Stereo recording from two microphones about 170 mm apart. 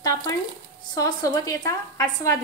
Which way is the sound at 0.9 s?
20° left (ahead or behind).